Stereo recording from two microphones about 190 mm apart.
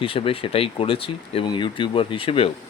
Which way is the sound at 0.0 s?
30° left (ahead or behind).